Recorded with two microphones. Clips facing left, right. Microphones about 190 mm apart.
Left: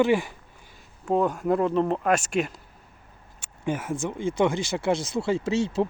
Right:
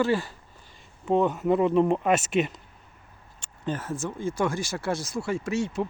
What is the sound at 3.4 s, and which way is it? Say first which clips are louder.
Speech: left 3 dB; 10° left (ahead or behind).